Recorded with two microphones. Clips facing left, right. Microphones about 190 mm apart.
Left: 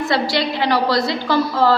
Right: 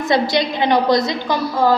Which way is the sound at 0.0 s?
20° right (ahead or behind).